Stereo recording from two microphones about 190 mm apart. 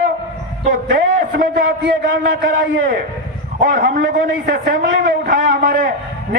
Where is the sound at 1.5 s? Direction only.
80° right.